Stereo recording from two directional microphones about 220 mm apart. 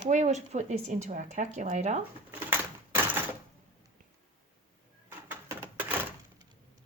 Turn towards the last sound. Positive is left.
turn(degrees=-10)  # may be behind; listen again after turning